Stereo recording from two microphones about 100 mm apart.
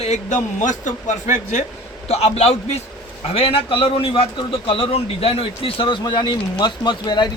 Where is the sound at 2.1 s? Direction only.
90° left.